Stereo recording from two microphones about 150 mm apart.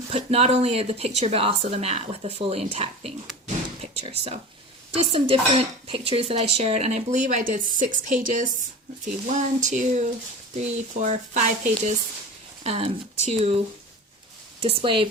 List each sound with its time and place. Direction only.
0.1 s dishes: 45° right (ahead or behind)
3.4 s a sound: 45° right (ahead or behind)
5.0 s dishes: 40° right (ahead or behind)
14.6 s speech: 40° right (ahead or behind)